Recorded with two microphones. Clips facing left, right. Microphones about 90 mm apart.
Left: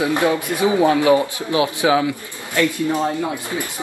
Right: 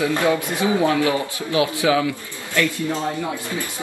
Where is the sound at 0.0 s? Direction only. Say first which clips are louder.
Left 1 dB; 20° left (ahead or behind).